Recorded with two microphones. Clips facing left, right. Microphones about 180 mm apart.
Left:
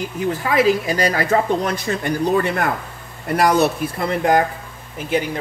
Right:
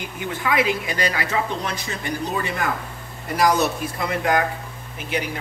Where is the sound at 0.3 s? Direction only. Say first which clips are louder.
Left 5 dB; 35° left (ahead or behind); by 3.7 s 60° left (ahead or behind).